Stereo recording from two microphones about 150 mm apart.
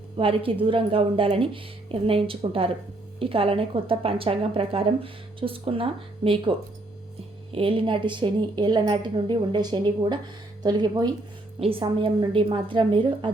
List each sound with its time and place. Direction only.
0.2 s speech: 35° right (ahead or behind)
7.5 s speech: 35° right (ahead or behind)